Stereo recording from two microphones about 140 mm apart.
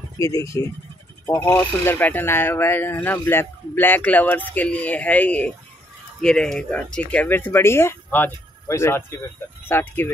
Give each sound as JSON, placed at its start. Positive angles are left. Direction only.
{"t": 0.2, "sound": "speech", "side_deg": 25}